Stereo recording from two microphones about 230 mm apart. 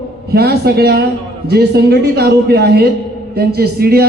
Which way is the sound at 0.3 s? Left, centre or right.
Right.